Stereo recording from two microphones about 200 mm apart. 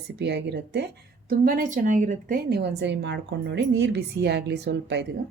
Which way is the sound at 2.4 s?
55° right (ahead or behind).